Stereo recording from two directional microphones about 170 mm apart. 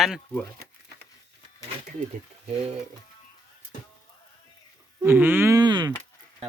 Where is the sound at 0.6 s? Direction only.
70° right (ahead or behind).